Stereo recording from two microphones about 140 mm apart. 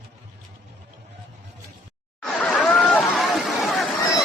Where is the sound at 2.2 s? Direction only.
5° left (ahead or behind).